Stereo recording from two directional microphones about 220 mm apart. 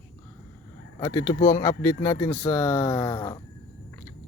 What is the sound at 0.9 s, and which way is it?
Mantra, 15° left (ahead or behind).